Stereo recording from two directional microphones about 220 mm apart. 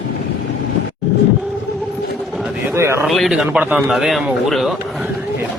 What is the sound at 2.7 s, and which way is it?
Speech, 10° right (ahead or behind).